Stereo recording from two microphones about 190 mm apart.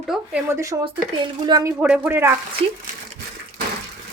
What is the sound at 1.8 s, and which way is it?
Speech, 10° right (ahead or behind).